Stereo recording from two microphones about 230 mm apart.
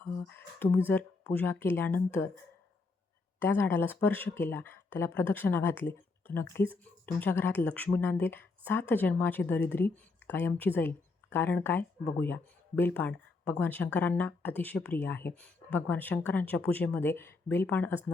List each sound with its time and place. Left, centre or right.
0.3 s speech: centre
3.4 s speech: centre